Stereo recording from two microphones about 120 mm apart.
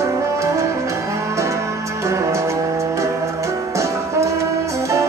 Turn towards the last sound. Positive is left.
turn(degrees=-25)  # may be behind; listen again after turning